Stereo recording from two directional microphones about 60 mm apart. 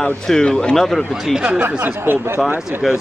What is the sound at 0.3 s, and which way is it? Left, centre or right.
Speech, centre.